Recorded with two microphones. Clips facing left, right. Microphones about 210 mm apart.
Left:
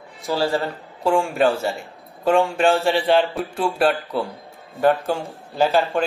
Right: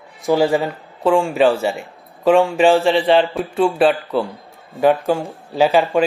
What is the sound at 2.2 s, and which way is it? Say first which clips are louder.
A man's voice: right 4 dB; centre (ahead or behind).